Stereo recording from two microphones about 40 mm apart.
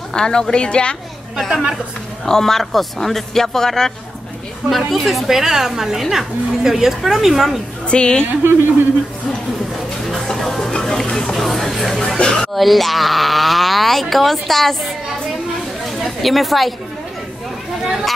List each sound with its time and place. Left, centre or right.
0.1 s a woman's voice: centre
1.5 s a woman's voice: centre
2.2 s a man's voice: centre
4.6 s a woman's voice: centre
7.9 s a woman's voice: left
10.0 s music: centre
11.3 s speech: centre
12.2 s a woman's voice: left
12.5 s speech: centre
16.0 s speech: centre